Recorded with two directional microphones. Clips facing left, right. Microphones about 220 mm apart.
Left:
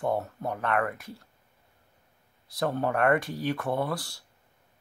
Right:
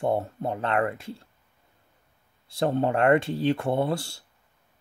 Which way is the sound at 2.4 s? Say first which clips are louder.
Right 4 dB; 25° right (ahead or behind).